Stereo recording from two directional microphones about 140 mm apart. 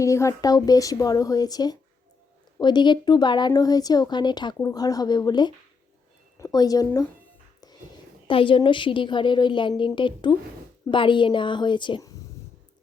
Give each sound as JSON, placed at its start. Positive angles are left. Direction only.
{"t": 0.0, "sound": "a woman's voice", "side_deg": 20}
{"t": 8.3, "sound": "a woman's voice", "side_deg": 40}